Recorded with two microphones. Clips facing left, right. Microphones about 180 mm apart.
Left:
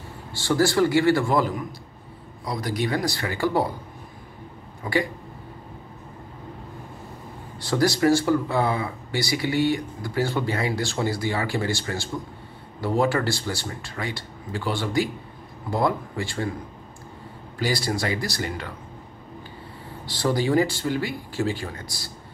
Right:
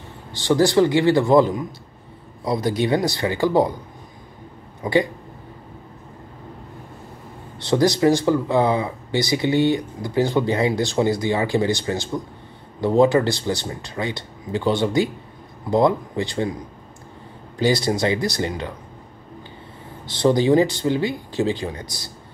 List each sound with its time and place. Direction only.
0.3 s speech: 20° right (ahead or behind)
4.8 s speech: 15° right (ahead or behind)
7.5 s speech: 20° right (ahead or behind)
17.6 s speech: 20° right (ahead or behind)
20.1 s speech: 20° right (ahead or behind)